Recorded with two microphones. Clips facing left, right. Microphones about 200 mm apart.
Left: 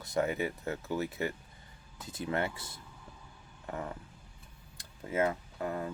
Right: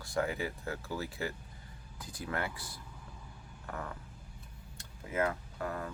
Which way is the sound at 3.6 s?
25° left (ahead or behind).